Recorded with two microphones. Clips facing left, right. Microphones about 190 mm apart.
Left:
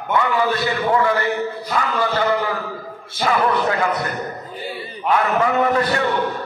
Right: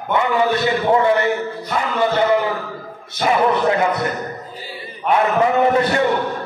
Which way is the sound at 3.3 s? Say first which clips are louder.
Right 3 dB; 25° right (ahead or behind).